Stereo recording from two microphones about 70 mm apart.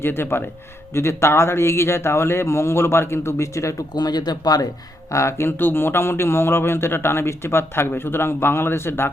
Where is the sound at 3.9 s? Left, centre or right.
Left.